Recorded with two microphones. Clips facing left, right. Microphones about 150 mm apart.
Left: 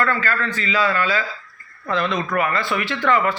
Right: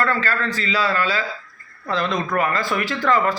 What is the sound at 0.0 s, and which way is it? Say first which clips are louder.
A man's voice: even; 35° right (ahead or behind).